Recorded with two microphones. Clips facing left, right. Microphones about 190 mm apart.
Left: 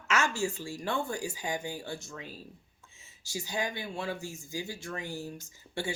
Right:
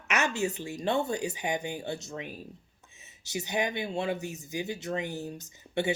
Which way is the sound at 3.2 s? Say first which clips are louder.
Right 4 dB; 20° right (ahead or behind).